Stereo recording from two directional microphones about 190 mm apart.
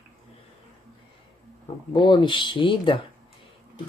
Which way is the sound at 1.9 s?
25° left (ahead or behind).